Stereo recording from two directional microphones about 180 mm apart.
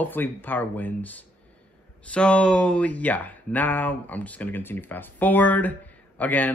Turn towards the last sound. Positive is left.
turn(degrees=10)  # may be behind; listen again after turning